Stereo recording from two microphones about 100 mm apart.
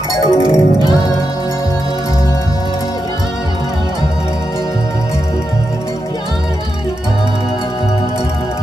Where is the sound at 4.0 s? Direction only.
35° left (ahead or behind).